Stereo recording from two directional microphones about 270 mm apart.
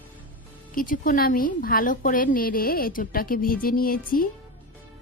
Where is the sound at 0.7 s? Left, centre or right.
Left.